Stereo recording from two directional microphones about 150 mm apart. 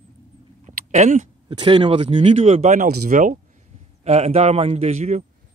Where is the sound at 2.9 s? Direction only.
70° right (ahead or behind).